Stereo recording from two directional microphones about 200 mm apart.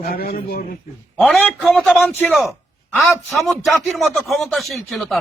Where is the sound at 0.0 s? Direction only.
50° left (ahead or behind).